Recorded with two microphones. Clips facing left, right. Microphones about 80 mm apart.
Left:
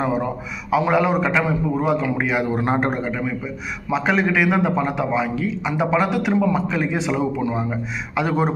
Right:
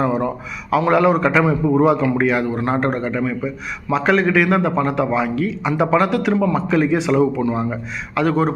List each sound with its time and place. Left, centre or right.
0.0 s a sound: centre
0.7 s a man's voice: centre
2.5 s a man's voice: left